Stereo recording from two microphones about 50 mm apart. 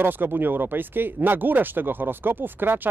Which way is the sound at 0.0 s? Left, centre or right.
Right.